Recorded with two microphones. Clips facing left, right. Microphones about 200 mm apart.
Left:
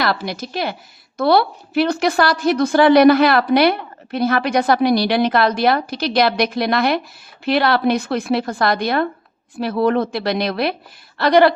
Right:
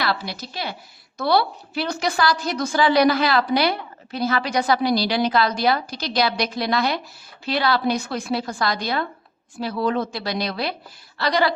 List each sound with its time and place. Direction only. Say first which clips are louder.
0.0 s a woman's voice: left 5 dB; 50° left (ahead or behind)